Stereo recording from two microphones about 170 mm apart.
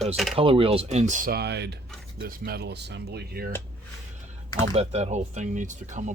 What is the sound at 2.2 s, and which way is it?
Speech, 65° right (ahead or behind).